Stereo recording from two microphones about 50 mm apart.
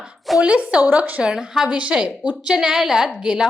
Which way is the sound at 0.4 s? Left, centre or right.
Right.